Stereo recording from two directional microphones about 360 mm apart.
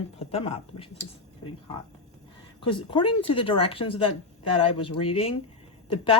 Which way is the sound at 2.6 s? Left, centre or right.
Centre.